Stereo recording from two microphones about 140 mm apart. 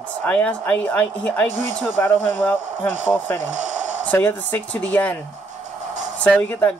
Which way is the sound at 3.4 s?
60° right (ahead or behind).